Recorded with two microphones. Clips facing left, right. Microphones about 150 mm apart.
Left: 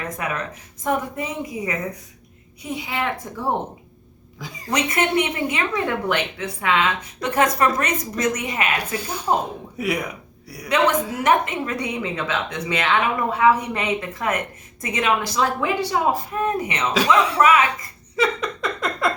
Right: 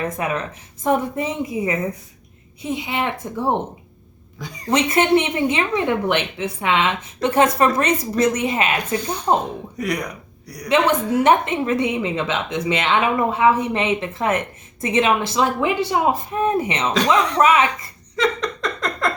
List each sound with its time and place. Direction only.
0.2 s a woman's voice: 25° right (ahead or behind)
4.4 s a woman's voice: centre (ahead or behind)
4.7 s a woman's voice: 30° right (ahead or behind)
9.7 s speech: 5° left (ahead or behind)
11.2 s a woman's voice: 25° right (ahead or behind)
18.2 s a sound: 10° left (ahead or behind)